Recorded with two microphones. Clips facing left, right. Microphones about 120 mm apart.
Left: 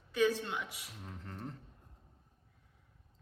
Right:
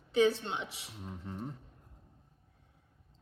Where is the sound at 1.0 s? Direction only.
5° right (ahead or behind).